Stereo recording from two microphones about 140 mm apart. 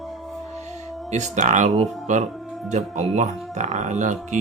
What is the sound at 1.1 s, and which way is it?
Speech, 55° right (ahead or behind).